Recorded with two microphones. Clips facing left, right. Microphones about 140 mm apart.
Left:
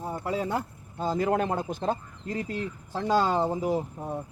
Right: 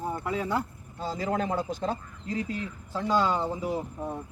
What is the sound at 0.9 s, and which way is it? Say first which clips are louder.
A man's voice: left 4 dB; 50° left (ahead or behind).